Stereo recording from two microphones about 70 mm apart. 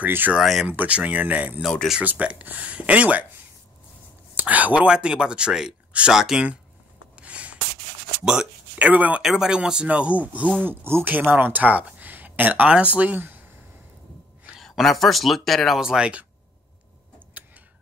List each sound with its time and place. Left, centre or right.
0.0 s speech: right
0.4 s speech: centre
0.7 s speech: centre
4.4 s speech: right; by 6.4 s centre
7.2 s writing: centre
8.7 s speech: right
9.2 s speech: centre
10.6 s speech: right
14.6 s speech: centre
15.8 s speech: centre
17.4 s tick-tock: right